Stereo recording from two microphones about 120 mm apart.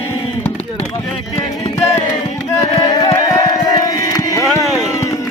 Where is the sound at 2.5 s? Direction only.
25° left (ahead or behind).